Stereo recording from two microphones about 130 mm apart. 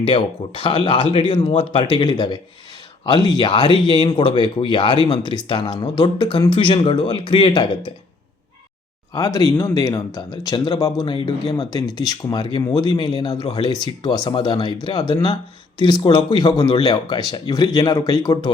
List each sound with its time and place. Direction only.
0.0 s speech: 40° left (ahead or behind)
9.1 s speech: 25° left (ahead or behind)
11.0 s speech: 40° left (ahead or behind)
11.5 s speech: 30° left (ahead or behind)